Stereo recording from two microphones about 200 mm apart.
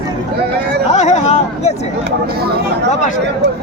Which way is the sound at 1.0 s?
35° left (ahead or behind).